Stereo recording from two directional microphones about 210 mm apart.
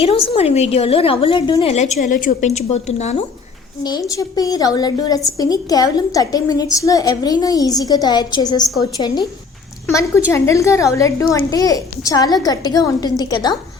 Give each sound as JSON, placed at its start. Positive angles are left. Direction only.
{"t": 0.0, "sound": "a woman's voice", "side_deg": 30}
{"t": 1.7, "sound": "a woman's voice", "side_deg": 35}
{"t": 4.1, "sound": "a woman's voice", "side_deg": 15}